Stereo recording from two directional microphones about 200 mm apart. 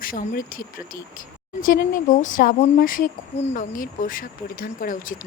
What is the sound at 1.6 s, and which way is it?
Speech, 45° left (ahead or behind).